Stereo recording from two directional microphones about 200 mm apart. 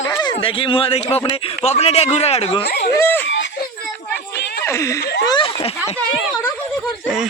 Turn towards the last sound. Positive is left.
turn(degrees=25)  # may be behind; listen again after turning